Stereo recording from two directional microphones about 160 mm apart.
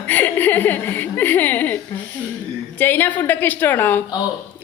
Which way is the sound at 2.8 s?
10° left (ahead or behind).